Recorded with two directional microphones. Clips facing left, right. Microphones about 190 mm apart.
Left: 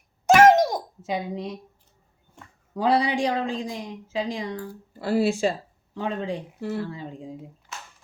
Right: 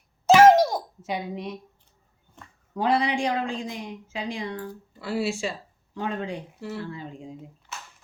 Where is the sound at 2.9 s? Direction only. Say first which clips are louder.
Left 2 dB; 35° left (ahead or behind).